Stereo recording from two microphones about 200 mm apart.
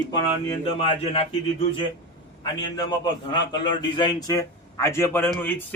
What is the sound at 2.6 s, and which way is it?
A man's voice, 20° left (ahead or behind).